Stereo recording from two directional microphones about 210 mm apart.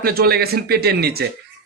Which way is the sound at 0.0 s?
45° right (ahead or behind).